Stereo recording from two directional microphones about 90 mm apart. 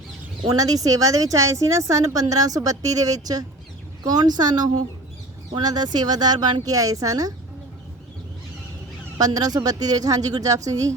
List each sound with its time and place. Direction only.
0.4 s a woman's voice: 45° right (ahead or behind)
9.1 s speech: 45° right (ahead or behind)